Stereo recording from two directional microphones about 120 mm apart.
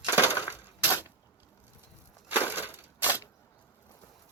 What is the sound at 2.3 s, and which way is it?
Crushing, 15° right (ahead or behind).